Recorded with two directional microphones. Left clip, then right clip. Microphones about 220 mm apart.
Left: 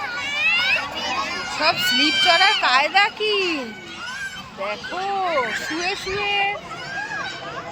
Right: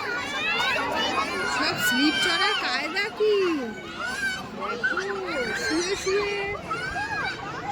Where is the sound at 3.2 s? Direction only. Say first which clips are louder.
Left 1 dB; 45° left (ahead or behind).